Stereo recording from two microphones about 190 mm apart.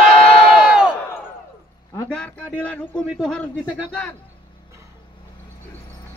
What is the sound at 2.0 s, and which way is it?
A man's voice, 5° left (ahead or behind).